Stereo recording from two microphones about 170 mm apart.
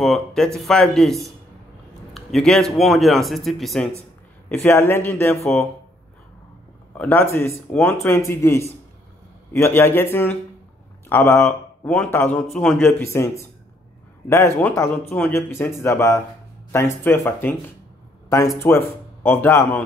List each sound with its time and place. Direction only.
0.0 s speech: centre (ahead or behind)
4.6 s speech: 15° left (ahead or behind)
7.0 s speech: 10° left (ahead or behind)
11.1 s a man's voice: 10° left (ahead or behind)
12.4 s speech: centre (ahead or behind)
12.7 s speech: 15° left (ahead or behind)
14.3 s speech: 15° left (ahead or behind)